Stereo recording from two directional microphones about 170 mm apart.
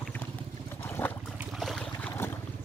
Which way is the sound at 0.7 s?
10° left (ahead or behind).